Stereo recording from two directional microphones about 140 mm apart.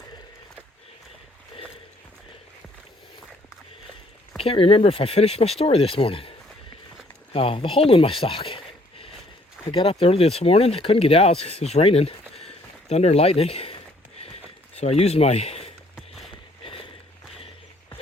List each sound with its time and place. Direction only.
4.4 s speech: 40° left (ahead or behind)
7.3 s speech: 40° left (ahead or behind)
12.4 s a sound: 45° left (ahead or behind)
14.8 s speech: 50° left (ahead or behind)
16.0 s a sound: centre (ahead or behind)
16.3 s walk: 40° left (ahead or behind)